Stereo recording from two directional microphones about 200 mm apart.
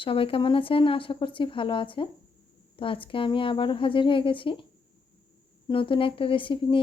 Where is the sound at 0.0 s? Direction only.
25° left (ahead or behind).